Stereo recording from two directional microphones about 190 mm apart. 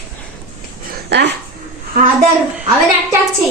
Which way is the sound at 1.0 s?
60° right (ahead or behind).